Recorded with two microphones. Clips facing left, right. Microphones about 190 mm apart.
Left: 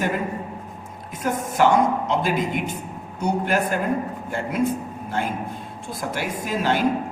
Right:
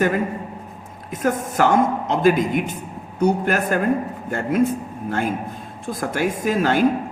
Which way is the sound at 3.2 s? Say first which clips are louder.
Right 3 dB; 50° right (ahead or behind).